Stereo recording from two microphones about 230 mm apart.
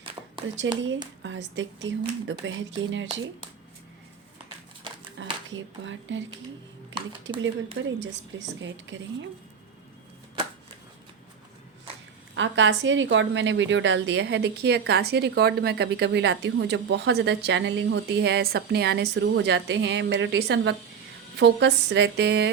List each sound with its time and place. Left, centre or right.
0.4 s a woman's voice: right
5.2 s a sound: right
5.8 s a woman's voice: right
7.3 s a woman's voice: right
12.3 s a woman's voice: right